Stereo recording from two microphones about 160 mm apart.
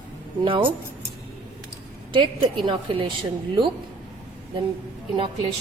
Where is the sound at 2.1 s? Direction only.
30° right (ahead or behind).